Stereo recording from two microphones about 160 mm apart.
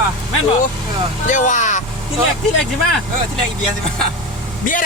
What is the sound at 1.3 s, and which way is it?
Speech, 50° left (ahead or behind).